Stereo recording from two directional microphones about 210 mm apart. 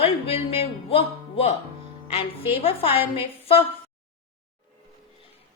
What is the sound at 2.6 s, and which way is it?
A man's voice, 25° left (ahead or behind).